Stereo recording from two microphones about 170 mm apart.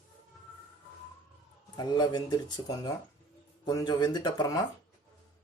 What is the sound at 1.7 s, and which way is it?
Speech, 25° left (ahead or behind).